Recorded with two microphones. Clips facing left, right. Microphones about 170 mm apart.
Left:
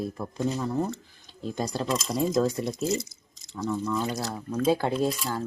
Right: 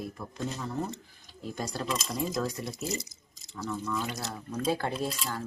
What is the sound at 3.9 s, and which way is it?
Speech, 40° left (ahead or behind).